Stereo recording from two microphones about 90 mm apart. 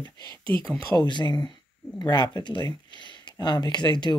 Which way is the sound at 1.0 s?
55° left (ahead or behind).